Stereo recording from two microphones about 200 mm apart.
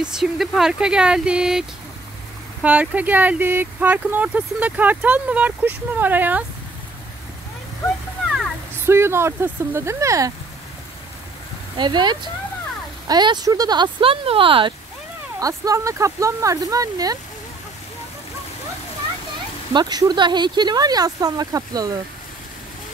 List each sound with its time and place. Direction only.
0.0 s speech: centre (ahead or behind)
8.8 s speech: 10° right (ahead or behind)
11.7 s speech: 20° right (ahead or behind)
19.7 s speech: 20° right (ahead or behind)